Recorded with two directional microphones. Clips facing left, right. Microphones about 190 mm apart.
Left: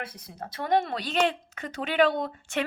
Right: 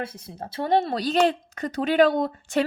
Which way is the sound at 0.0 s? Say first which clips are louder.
Right 5 dB; 25° right (ahead or behind).